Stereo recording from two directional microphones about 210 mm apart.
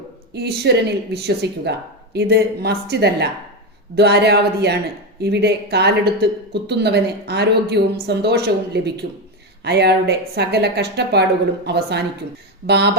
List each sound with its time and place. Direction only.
0.3 s a woman's voice: 50° right (ahead or behind)